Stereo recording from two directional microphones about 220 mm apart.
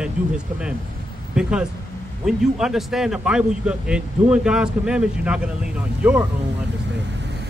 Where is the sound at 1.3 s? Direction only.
5° right (ahead or behind).